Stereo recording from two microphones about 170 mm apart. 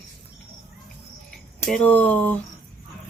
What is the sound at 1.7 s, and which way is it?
Speech, 10° left (ahead or behind).